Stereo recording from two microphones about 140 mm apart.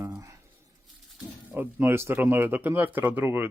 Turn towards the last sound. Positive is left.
turn(degrees=-15)  # may be behind; listen again after turning